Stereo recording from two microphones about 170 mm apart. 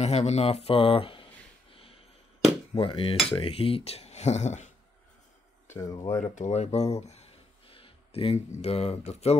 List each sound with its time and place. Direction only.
0.0 s speech: 40° left (ahead or behind)
2.7 s speech: 30° left (ahead or behind)
5.7 s speech: 20° left (ahead or behind)
6.3 s speech: 40° left (ahead or behind)